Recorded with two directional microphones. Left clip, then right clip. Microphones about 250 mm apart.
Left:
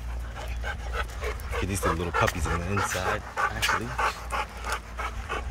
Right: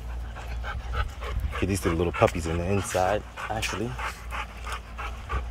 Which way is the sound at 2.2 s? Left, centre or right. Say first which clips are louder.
Right 4 dB; centre.